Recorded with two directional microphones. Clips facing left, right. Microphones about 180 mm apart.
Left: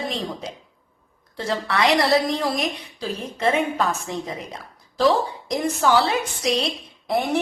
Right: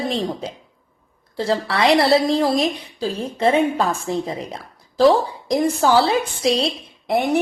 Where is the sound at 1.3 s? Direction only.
30° right (ahead or behind).